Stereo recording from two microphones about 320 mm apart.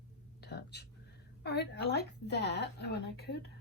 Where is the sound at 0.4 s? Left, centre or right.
Left.